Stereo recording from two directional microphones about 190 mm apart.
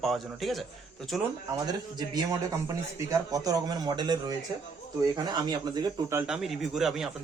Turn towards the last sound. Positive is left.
turn(degrees=0)  # may be behind; listen again after turning